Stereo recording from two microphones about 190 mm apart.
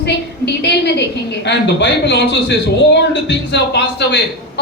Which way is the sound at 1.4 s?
65° left (ahead or behind).